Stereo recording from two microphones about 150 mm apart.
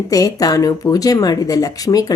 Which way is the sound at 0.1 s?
25° left (ahead or behind).